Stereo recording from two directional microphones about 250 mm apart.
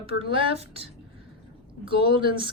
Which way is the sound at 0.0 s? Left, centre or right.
Right.